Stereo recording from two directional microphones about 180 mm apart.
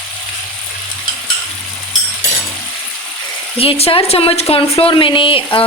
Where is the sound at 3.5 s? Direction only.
30° left (ahead or behind).